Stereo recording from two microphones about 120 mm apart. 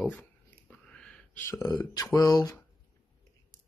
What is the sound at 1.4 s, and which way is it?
Speech, 25° left (ahead or behind).